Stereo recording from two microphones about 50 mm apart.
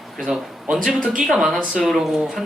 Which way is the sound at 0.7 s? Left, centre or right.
Centre.